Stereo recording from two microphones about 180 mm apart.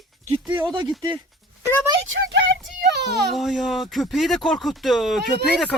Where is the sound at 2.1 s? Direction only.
90° right.